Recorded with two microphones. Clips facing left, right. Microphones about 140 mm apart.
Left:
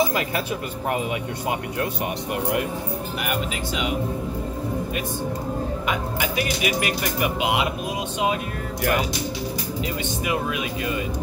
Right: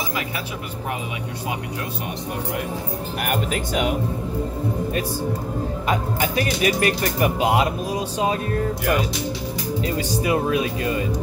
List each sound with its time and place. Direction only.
3.3 s speech: 50° right (ahead or behind)
5.9 s speech: 35° right (ahead or behind)
10.0 s speech: 35° right (ahead or behind)